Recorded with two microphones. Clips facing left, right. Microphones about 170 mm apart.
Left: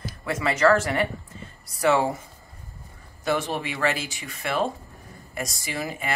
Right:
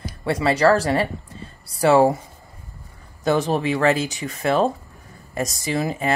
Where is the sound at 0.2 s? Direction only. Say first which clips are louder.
Right 4 dB; 30° right (ahead or behind).